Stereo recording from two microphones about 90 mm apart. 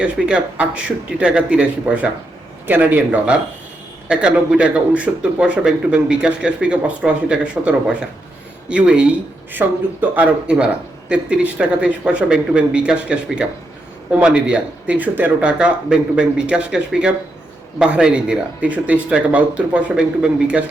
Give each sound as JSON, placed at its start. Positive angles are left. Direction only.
{"t": 0.0, "sound": "a man's voice", "side_deg": -10}